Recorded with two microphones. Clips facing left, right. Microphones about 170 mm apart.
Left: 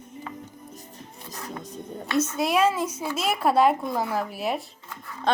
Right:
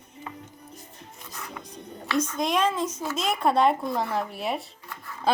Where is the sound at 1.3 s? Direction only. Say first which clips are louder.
Left 4 dB; 40° left (ahead or behind).